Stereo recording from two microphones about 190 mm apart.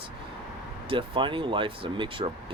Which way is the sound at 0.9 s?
25° right (ahead or behind).